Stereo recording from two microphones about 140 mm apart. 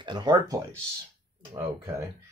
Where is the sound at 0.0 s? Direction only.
30° right (ahead or behind).